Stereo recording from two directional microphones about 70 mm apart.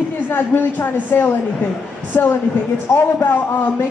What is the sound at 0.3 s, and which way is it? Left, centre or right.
Speech, left.